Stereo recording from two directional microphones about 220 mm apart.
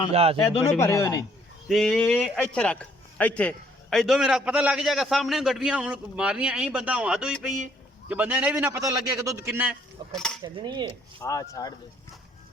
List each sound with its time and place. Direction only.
0.1 s cutlery: 25° right (ahead or behind)
0.8 s speech: 15° left (ahead or behind)
1.6 s a man's voice: centre (ahead or behind)
10.4 s cutlery: 20° right (ahead or behind)
11.2 s speech: 15° left (ahead or behind)